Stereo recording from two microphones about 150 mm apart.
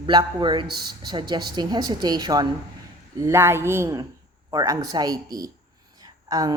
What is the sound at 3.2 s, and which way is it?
A woman's voice, 20° right (ahead or behind).